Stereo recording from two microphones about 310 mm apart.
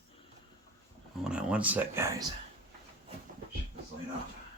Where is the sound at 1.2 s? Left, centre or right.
Centre.